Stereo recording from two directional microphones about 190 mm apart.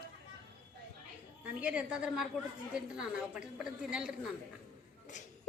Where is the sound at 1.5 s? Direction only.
5° right (ahead or behind).